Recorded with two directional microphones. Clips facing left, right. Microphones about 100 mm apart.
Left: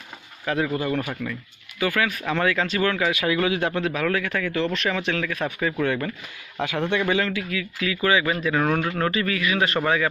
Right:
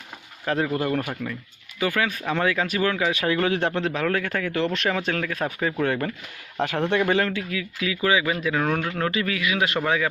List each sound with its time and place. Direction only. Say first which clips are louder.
0.7 s speech: right 1 dB; 50° right (ahead or behind)
1.8 s speech: left 1 dB; 20° right (ahead or behind)
3.1 s speech: even; 35° right (ahead or behind)
7.3 s speech: left 1 dB; 20° right (ahead or behind)
8.4 s speech: left 2 dB; centre (ahead or behind)
9.0 s speech: left 1 dB; 5° right (ahead or behind)